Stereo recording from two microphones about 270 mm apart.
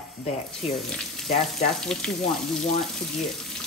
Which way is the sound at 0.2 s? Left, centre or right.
Left.